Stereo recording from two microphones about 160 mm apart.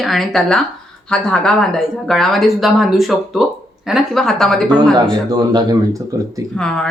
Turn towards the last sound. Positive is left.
turn(degrees=5)  # may be behind; listen again after turning